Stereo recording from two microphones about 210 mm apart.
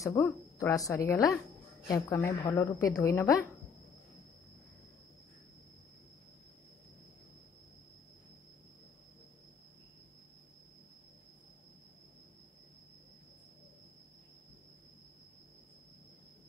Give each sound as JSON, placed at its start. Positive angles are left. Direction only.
{"t": 0.0, "sound": "a woman's voice", "side_deg": 15}